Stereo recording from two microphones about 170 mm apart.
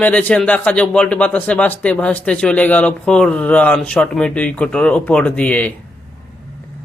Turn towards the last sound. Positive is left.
turn(degrees=10)  # may be behind; listen again after turning